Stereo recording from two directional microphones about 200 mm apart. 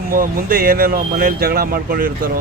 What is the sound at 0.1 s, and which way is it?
Speech, 45° right (ahead or behind).